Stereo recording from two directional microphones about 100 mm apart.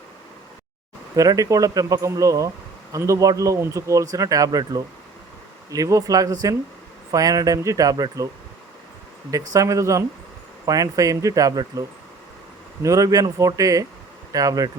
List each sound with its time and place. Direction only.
1.1 s a man's voice: 35° right (ahead or behind)
9.3 s a man's voice: 35° right (ahead or behind)